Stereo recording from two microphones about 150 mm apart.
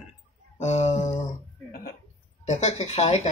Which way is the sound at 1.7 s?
75° left (ahead or behind).